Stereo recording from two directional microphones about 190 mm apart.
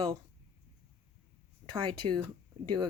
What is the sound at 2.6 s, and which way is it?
Speech, 25° right (ahead or behind).